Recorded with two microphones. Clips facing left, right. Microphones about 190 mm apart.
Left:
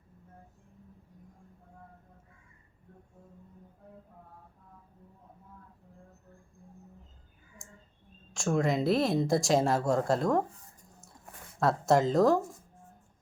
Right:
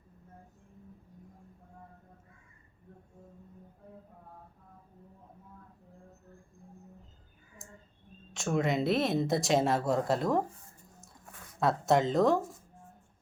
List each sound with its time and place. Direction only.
8.3 s speech: centre (ahead or behind)
11.6 s speech: centre (ahead or behind)